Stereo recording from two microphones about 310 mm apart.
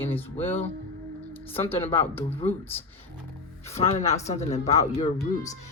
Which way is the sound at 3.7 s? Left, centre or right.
Centre.